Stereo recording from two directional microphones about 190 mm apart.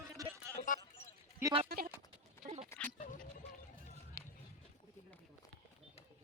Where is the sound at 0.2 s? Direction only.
20° right (ahead or behind).